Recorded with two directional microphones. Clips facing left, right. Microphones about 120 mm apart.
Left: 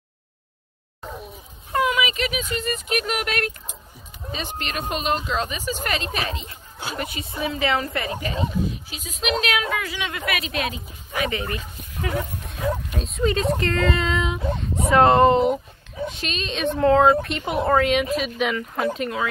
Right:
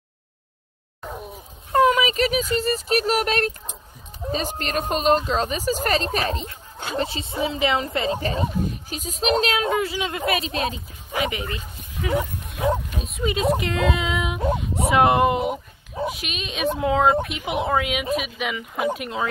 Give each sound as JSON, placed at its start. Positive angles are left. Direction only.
{"t": 1.7, "sound": "a woman's voice", "side_deg": -40}
{"t": 7.0, "sound": "speech", "side_deg": -25}
{"t": 8.2, "sound": "a woman's voice", "side_deg": -40}
{"t": 11.1, "sound": "speech", "side_deg": -15}
{"t": 13.0, "sound": "speech", "side_deg": -5}